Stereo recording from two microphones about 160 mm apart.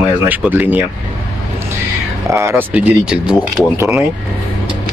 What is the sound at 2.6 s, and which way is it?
Speech, 10° right (ahead or behind).